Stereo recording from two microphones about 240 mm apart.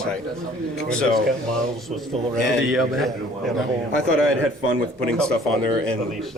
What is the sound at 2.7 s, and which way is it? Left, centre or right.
Speech, centre.